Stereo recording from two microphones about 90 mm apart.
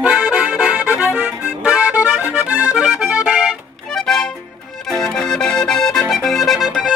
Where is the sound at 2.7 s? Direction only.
5° right (ahead or behind).